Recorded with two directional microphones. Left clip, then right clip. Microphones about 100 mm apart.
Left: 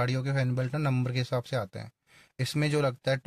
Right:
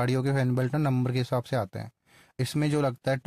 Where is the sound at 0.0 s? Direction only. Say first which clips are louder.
Right 3 dB; 75° right (ahead or behind).